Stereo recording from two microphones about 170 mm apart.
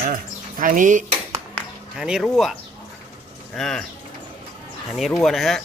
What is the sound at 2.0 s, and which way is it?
Speech, 5° right (ahead or behind).